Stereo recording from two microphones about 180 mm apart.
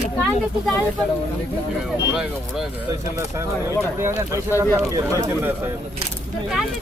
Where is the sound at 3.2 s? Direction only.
15° right (ahead or behind).